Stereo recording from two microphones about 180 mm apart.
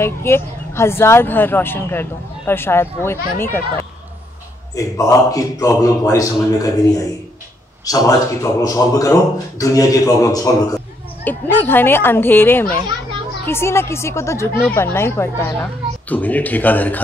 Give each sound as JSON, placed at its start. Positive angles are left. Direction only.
{"t": 0.0, "sound": "a man's voice", "side_deg": 15}
{"t": 7.8, "sound": "a man's voice", "side_deg": 20}